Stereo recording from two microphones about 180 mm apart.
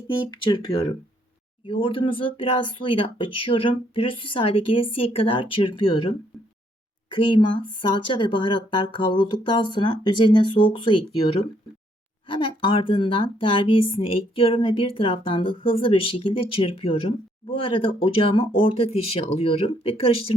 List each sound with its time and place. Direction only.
0.4 s speech: 25° left (ahead or behind)
12.4 s speech: 30° left (ahead or behind)